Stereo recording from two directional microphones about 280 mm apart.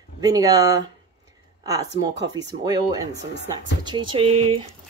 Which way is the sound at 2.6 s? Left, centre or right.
Centre.